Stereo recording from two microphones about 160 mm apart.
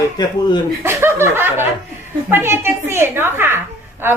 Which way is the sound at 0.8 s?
15° right (ahead or behind).